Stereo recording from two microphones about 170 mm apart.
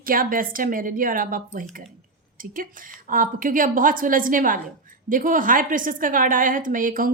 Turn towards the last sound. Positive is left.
turn(degrees=-55)  # may be behind; listen again after turning